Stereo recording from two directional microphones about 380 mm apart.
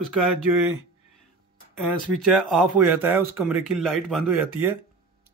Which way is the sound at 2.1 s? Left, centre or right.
Centre.